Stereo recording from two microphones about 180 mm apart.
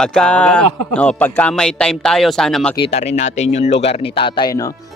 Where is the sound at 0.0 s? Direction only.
5° left (ahead or behind).